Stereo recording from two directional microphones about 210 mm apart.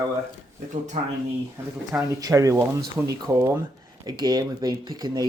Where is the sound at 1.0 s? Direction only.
30° right (ahead or behind).